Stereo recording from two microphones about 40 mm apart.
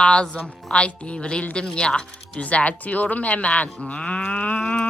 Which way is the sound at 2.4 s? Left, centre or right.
Left.